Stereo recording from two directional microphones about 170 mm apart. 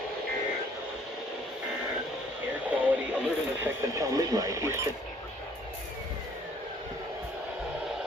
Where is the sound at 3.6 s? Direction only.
20° right (ahead or behind).